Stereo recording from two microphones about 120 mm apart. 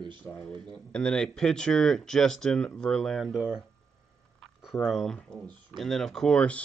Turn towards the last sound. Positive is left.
turn(degrees=10)  # may be behind; listen again after turning